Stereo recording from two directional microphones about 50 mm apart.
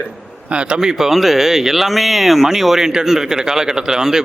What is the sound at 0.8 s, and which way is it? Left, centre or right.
Speech, centre.